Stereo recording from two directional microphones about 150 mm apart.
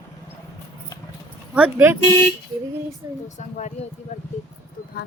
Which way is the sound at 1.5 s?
10° right (ahead or behind).